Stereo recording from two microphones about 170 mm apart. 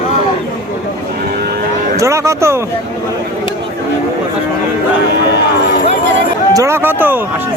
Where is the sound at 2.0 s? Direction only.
15° right (ahead or behind).